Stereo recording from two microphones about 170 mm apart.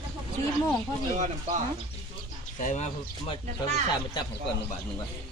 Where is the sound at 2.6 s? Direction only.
45° left (ahead or behind).